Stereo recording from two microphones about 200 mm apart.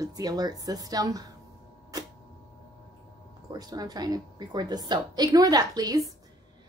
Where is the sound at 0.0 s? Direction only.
20° right (ahead or behind).